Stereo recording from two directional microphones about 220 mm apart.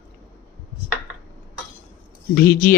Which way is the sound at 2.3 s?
40° left (ahead or behind).